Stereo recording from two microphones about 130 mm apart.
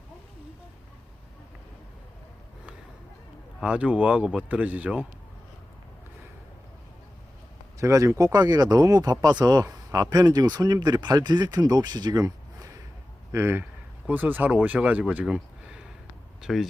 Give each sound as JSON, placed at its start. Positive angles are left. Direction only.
{"t": 3.6, "sound": "speech", "side_deg": -10}
{"t": 7.8, "sound": "speech", "side_deg": -25}